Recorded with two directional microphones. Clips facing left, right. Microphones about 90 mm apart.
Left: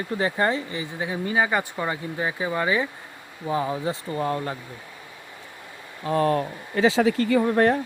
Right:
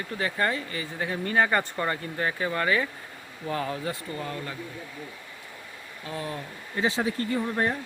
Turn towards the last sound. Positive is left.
turn(degrees=90)